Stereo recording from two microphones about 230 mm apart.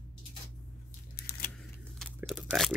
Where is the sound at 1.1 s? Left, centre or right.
Left.